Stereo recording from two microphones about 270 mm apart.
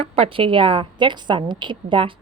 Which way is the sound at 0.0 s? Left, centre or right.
Right.